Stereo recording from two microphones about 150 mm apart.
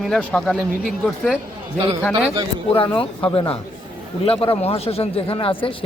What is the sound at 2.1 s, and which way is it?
Speech, 25° right (ahead or behind).